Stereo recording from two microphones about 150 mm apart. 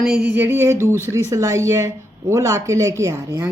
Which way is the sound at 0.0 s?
5° right (ahead or behind).